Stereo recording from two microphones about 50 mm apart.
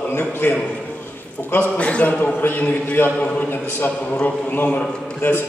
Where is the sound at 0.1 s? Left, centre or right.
Left.